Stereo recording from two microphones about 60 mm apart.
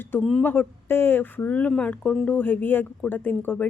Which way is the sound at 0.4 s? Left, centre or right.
Left.